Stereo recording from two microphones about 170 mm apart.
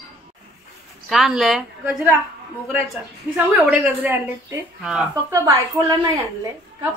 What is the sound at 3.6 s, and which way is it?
A woman's voice, 10° right (ahead or behind).